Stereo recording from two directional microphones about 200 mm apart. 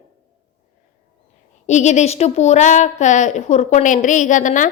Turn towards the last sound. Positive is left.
turn(degrees=40)  # may be behind; listen again after turning